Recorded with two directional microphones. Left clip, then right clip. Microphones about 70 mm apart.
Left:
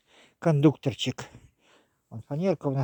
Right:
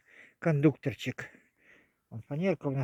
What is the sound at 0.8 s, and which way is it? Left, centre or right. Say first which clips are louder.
Speech: left 5 dB; left.